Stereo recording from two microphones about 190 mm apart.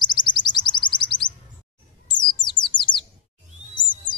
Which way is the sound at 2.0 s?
25° left (ahead or behind).